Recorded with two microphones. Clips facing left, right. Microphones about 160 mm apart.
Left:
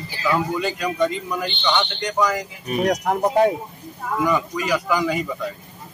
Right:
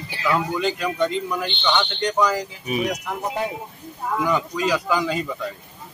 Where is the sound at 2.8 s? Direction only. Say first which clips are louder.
Left 8 dB; 60° left (ahead or behind).